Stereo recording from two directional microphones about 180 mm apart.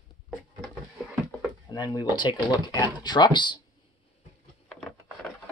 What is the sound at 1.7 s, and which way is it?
Speech, 25° left (ahead or behind).